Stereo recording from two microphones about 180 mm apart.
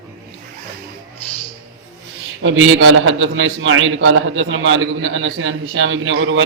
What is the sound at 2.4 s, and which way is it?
A man's voice, 90° right.